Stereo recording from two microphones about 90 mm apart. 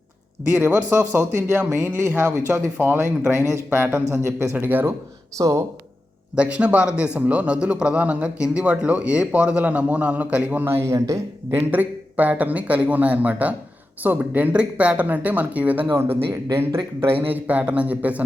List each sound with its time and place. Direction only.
0.4 s speech: 20° right (ahead or behind)
4.5 s speech: 20° right (ahead or behind)
5.4 s speech: 35° right (ahead or behind)
6.3 s a man's voice: 15° right (ahead or behind)
10.9 s speech: 40° right (ahead or behind)
11.5 s a man's voice: 20° right (ahead or behind)
17.2 s a man's voice: 20° right (ahead or behind)